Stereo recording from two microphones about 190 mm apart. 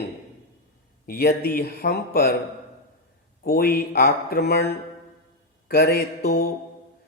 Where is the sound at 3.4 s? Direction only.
50° left (ahead or behind).